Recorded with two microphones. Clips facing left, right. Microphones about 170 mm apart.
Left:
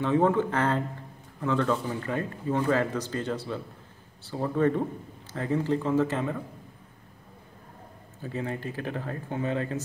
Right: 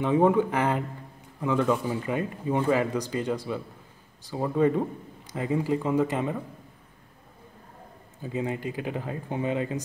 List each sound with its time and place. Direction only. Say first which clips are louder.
0.0 s speech: right 2 dB; 15° right (ahead or behind)
8.2 s speech: right 3 dB; 15° right (ahead or behind)